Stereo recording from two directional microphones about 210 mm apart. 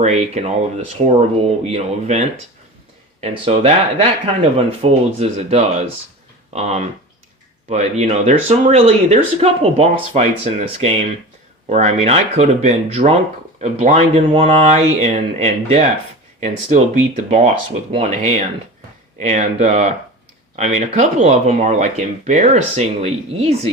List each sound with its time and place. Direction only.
0.0 s speech: 30° right (ahead or behind)